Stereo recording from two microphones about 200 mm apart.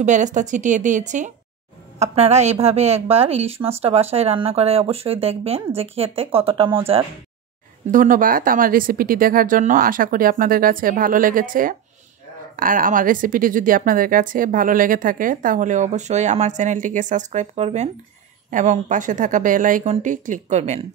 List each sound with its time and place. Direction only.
0.0 s a woman's voice: 40° right (ahead or behind)
7.9 s a woman's voice: 40° right (ahead or behind)